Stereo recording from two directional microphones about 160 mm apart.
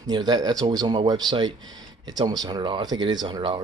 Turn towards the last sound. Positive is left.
turn(degrees=-30)  # may be behind; listen again after turning